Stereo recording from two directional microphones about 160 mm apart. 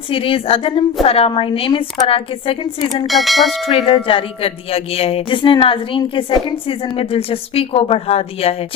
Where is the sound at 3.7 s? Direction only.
35° left (ahead or behind).